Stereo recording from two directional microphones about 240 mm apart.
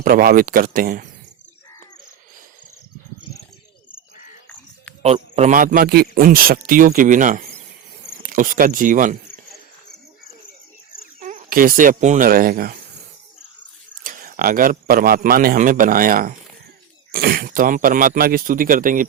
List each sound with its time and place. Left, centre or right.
0.0 s speech: right
5.0 s speech: right
11.2 s speech: right
14.0 s speech: right